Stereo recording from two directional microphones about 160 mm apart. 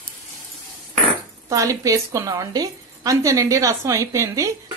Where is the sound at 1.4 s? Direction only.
20° right (ahead or behind).